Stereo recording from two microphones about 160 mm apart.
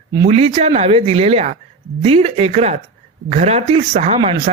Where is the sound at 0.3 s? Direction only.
40° right (ahead or behind).